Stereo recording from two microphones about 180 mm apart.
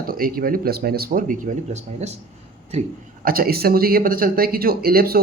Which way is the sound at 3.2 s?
55° right (ahead or behind).